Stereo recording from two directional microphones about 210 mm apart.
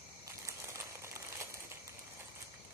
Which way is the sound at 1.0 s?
15° right (ahead or behind).